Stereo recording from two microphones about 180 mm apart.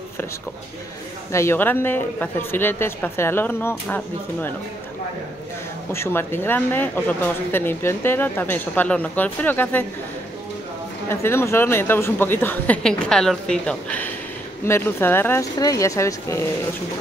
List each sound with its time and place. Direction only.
1.3 s speech: 15° left (ahead or behind)
5.9 s speech: 15° left (ahead or behind)
11.1 s speech: 15° left (ahead or behind)